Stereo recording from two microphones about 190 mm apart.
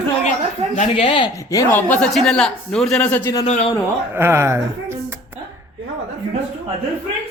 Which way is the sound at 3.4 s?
30° left (ahead or behind).